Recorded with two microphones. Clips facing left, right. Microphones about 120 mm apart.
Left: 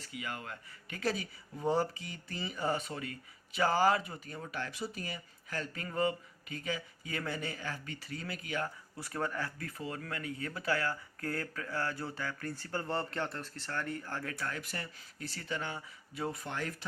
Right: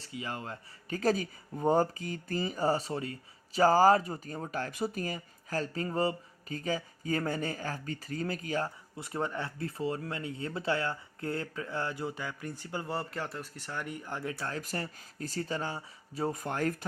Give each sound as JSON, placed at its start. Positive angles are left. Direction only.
{"t": 0.0, "sound": "speech", "side_deg": -30}
{"t": 9.0, "sound": "speech", "side_deg": -20}
{"t": 14.3, "sound": "speech", "side_deg": -30}